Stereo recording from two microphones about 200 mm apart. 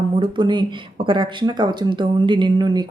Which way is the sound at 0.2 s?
25° right (ahead or behind).